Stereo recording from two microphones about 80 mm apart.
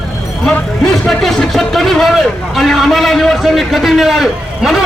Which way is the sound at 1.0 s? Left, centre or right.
Centre.